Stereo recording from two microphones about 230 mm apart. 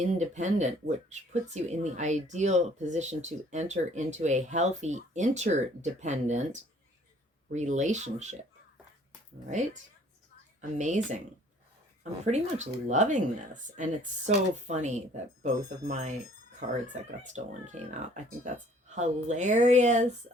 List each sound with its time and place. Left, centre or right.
0.0 s speech: right
10.6 s speech: right
12.2 s speech: right